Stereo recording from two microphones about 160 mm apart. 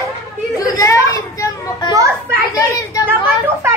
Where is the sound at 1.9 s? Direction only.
20° right (ahead or behind).